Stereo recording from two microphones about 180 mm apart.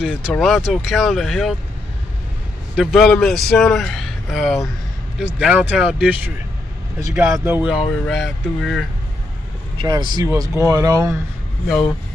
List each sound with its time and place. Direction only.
0.0 s speech: centre (ahead or behind)
2.8 s speech: centre (ahead or behind)
7.0 s speech: 15° right (ahead or behind); by 8.8 s centre (ahead or behind)
9.8 s speech: 25° right (ahead or behind)
11.6 s speech: centre (ahead or behind)